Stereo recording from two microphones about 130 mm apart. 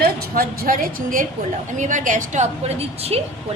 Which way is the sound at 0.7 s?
90° right.